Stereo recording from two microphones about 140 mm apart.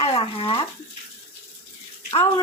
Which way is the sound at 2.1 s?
40° left (ahead or behind).